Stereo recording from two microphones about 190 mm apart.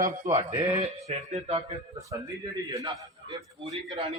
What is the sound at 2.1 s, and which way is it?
A man's voice, 15° right (ahead or behind).